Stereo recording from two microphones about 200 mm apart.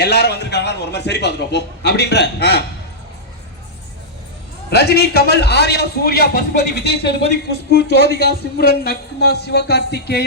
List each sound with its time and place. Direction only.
0.0 s a man's voice: 55° left (ahead or behind)
4.7 s a man's voice: 55° left (ahead or behind)